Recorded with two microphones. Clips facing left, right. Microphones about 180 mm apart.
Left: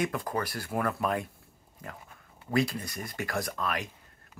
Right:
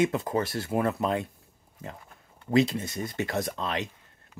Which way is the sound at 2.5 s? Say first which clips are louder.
Right 5 dB; 25° right (ahead or behind).